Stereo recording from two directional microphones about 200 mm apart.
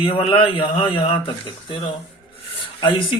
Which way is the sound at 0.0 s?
25° left (ahead or behind).